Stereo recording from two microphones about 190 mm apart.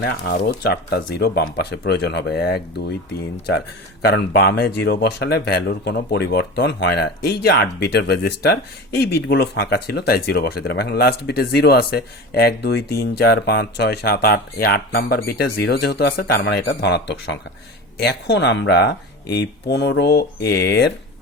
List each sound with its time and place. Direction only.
0.0 s speech: 55° left (ahead or behind)
4.0 s speech: 55° left (ahead or behind)